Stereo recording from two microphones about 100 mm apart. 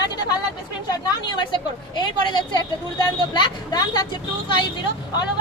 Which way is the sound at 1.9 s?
50° left (ahead or behind).